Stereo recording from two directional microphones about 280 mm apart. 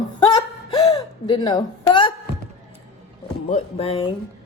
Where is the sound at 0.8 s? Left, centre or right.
Centre.